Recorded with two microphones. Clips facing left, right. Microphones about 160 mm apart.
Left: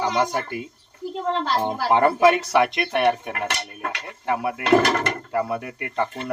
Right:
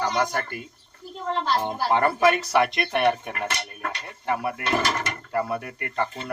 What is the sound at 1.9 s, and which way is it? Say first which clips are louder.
Speech: left 4 dB; 20° left (ahead or behind).